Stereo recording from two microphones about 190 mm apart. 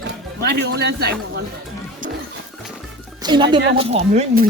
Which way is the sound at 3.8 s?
35° right (ahead or behind).